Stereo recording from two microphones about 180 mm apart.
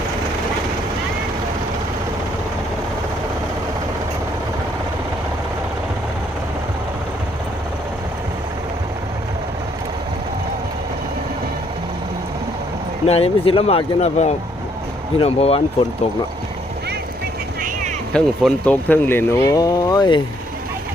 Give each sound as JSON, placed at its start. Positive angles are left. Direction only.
{"t": 13.1, "sound": "speech", "side_deg": 35}
{"t": 18.1, "sound": "speech", "side_deg": 5}